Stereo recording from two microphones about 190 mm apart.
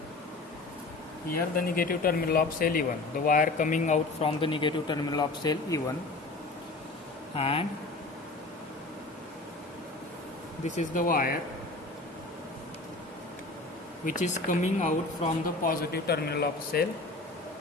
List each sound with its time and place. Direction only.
1.5 s speech: 50° left (ahead or behind); by 5.8 s 20° left (ahead or behind)
7.3 s speech: 30° left (ahead or behind)
10.8 s speech: 45° left (ahead or behind)
14.0 s speech: 45° left (ahead or behind)